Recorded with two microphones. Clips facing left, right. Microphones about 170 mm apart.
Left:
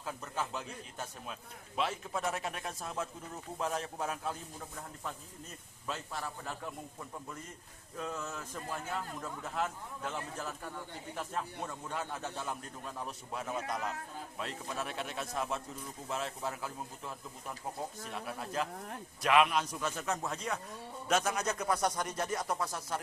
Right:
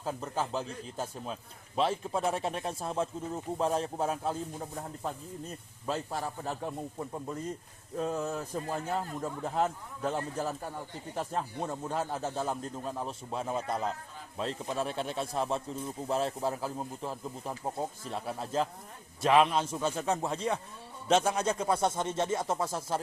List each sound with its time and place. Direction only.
0.0 s a man's voice: 30° right (ahead or behind)